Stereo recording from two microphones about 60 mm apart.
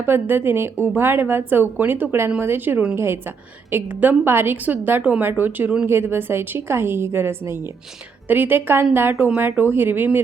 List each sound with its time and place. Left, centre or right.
0.0 s a woman's voice: right
5.8 s a woman's voice: right